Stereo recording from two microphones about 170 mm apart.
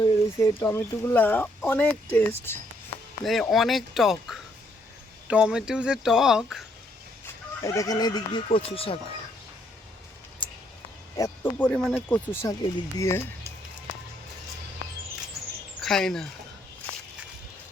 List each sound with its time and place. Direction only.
0.0 s speech: 15° left (ahead or behind)
3.5 s speech: centre (ahead or behind)
7.6 s speech: 20° left (ahead or behind)
8.4 s speech: 35° left (ahead or behind)
10.4 s a sound: 30° left (ahead or behind)
11.2 s speech: 10° left (ahead or behind)
15.8 s speech: 5° left (ahead or behind)